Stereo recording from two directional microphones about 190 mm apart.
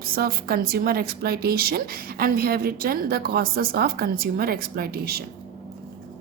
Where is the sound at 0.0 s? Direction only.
50° right (ahead or behind).